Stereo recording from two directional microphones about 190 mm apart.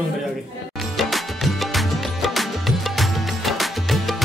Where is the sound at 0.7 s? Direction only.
Centre (ahead or behind).